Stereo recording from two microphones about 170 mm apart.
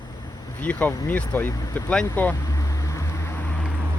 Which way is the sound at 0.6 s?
10° left (ahead or behind).